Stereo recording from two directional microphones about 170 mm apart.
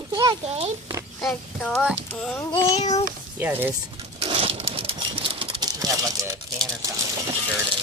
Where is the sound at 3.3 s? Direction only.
10° right (ahead or behind).